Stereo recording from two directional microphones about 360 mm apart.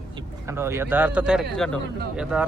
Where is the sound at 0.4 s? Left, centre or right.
Centre.